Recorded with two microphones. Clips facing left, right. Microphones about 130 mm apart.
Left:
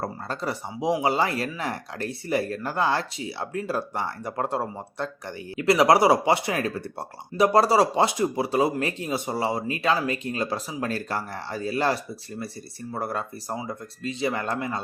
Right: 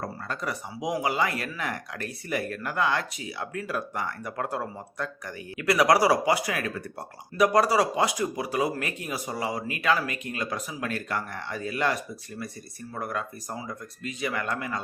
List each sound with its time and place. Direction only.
0.0 s speech: 30° left (ahead or behind)